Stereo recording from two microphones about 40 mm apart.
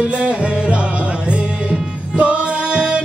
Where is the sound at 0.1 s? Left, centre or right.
Right.